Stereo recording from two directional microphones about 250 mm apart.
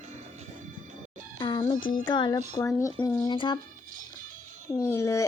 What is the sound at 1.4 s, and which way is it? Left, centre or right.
Music, centre.